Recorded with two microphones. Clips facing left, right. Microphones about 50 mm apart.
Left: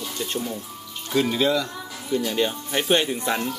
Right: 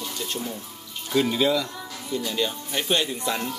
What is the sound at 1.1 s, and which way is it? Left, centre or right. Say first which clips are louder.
Speech: left 1 dB; centre.